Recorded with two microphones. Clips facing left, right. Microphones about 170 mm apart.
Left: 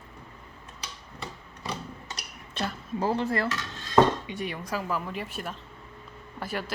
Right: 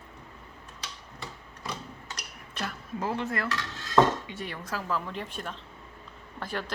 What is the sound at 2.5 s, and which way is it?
Speech, 30° left (ahead or behind).